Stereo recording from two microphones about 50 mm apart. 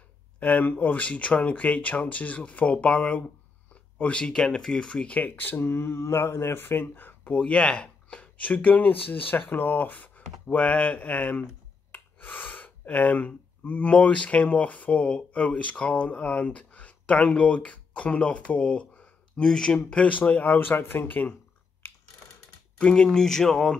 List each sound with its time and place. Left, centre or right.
0.4 s speech: left
5.9 s speech: left
7.3 s speech: left
19.4 s speech: centre; by 21.4 s left
22.8 s speech: left
23.0 s speech: centre